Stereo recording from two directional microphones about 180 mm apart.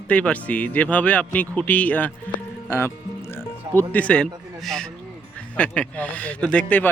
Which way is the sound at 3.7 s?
10° left (ahead or behind).